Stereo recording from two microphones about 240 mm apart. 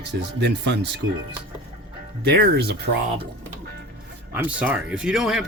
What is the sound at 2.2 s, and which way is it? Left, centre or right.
Speech, right.